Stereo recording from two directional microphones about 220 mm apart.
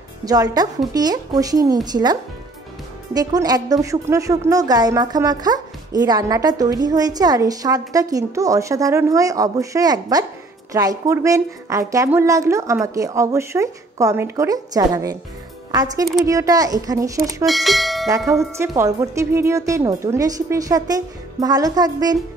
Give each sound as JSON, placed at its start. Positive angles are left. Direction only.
{"t": 0.2, "sound": "a woman's voice", "side_deg": -15}
{"t": 3.2, "sound": "a woman's voice", "side_deg": -15}
{"t": 17.5, "sound": "speech", "side_deg": 0}
{"t": 18.2, "sound": "tubular bells", "side_deg": 0}
{"t": 18.6, "sound": "a woman's voice", "side_deg": -15}